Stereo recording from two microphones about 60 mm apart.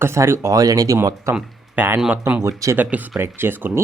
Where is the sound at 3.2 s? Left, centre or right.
Right.